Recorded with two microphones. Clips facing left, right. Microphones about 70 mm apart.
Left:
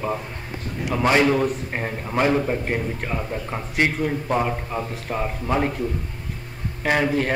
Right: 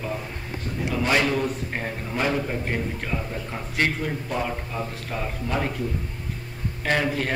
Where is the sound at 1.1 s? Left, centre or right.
Left.